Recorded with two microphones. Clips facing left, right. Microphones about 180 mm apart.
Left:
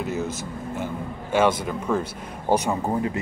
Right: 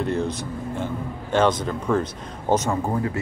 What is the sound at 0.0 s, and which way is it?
Speech, 5° left (ahead or behind).